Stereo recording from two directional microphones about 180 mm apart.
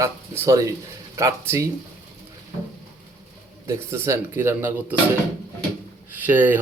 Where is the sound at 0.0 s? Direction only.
15° right (ahead or behind).